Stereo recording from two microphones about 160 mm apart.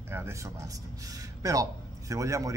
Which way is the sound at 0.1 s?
15° right (ahead or behind).